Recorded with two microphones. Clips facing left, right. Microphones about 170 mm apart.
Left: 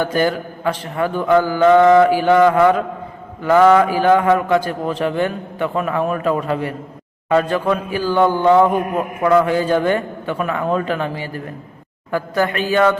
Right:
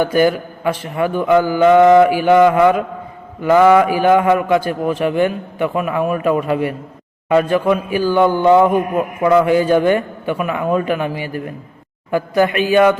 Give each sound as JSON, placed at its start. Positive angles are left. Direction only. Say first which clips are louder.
{"t": 0.0, "sound": "a man's voice", "louder": "right 4 dB", "side_deg": -15}